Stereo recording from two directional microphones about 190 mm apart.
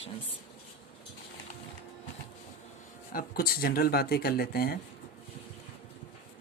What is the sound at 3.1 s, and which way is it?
Speech, 50° left (ahead or behind).